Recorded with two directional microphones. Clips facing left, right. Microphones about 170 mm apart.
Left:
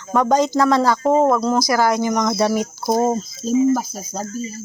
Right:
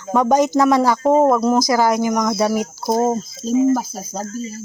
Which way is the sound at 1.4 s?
15° right (ahead or behind).